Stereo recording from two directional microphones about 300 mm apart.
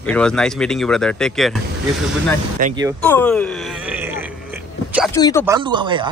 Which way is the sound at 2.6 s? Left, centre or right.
Right.